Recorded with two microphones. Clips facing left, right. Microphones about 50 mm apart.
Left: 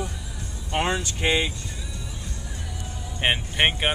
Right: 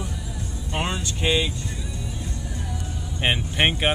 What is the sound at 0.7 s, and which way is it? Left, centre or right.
Speech, left.